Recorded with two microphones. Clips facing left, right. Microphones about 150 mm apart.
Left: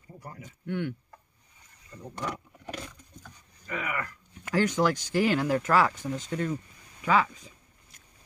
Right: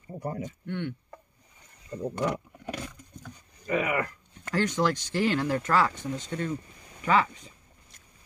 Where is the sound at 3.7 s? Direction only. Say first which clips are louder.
Right 7 dB; 15° right (ahead or behind).